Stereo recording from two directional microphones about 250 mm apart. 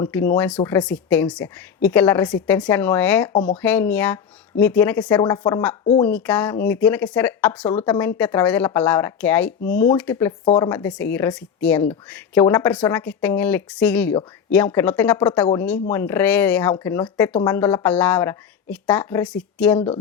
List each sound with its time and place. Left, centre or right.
0.0 s a woman's voice: centre
10.4 s speech: centre
10.7 s a woman's voice: centre
19.7 s speech: left